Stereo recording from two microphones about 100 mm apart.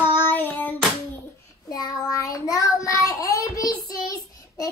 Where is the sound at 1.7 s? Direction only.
40° left (ahead or behind).